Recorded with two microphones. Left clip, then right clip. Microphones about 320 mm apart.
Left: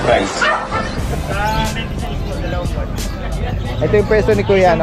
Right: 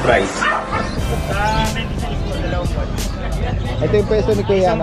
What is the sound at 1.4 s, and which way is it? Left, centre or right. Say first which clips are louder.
Speech: even; centre.